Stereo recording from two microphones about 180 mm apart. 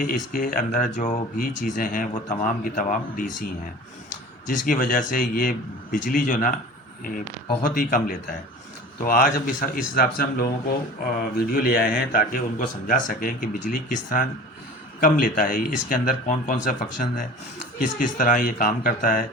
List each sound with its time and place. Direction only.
0.3 s a man's voice: 50° left (ahead or behind)
4.4 s a man's voice: 50° left (ahead or behind)
7.6 s a man's voice: 50° left (ahead or behind)
17.7 s a man's voice: 45° left (ahead or behind)